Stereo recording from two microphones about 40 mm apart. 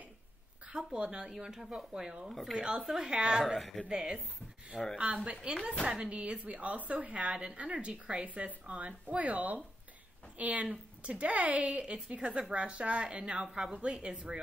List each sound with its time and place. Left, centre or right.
0.7 s speech: right
1.3 s speech: centre
2.0 s speech: centre
2.2 s a woman's voice: centre
2.5 s speech: right
2.8 s speech: centre
3.1 s speech: right
3.4 s a woman's voice: centre
4.9 s speech: right
13.4 s speech: centre